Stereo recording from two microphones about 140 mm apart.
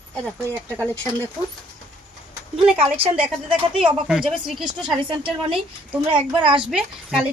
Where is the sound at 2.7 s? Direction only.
45° right (ahead or behind).